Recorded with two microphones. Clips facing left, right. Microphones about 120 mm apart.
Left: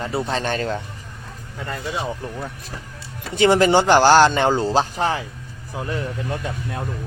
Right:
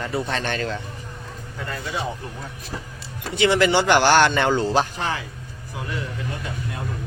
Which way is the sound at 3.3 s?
45° left (ahead or behind).